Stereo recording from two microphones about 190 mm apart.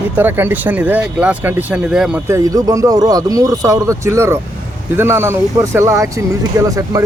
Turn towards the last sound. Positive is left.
turn(degrees=-20)  # may be behind; listen again after turning